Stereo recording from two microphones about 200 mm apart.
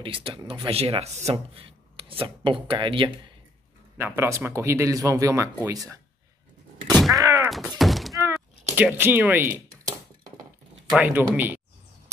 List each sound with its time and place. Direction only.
0.0 s speech: 25° right (ahead or behind)
4.0 s speech: 10° right (ahead or behind)
6.9 s groan: centre (ahead or behind)
7.2 s a sound: 15° right (ahead or behind)
7.4 s thunk: centre (ahead or behind)
8.7 s speech: 10° right (ahead or behind)
9.5 s a sound: 45° right (ahead or behind)
10.9 s speech: 10° right (ahead or behind)